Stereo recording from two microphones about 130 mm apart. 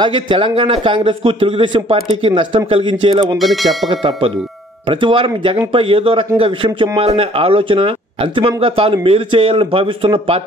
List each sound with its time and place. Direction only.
0.0 s a man's voice: 40° right (ahead or behind)
3.3 s speech: centre (ahead or behind)
3.9 s a man's voice: 45° right (ahead or behind)